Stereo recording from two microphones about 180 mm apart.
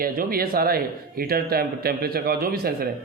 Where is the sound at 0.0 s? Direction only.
55° right (ahead or behind).